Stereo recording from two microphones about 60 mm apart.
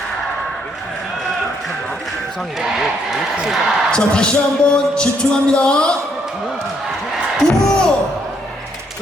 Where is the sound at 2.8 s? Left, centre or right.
Centre.